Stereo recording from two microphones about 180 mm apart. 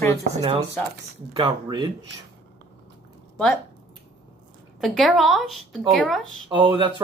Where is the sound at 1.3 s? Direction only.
25° right (ahead or behind).